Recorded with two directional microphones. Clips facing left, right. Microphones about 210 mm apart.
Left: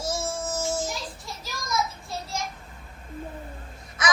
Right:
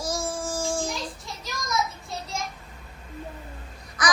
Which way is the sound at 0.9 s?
Centre (ahead or behind).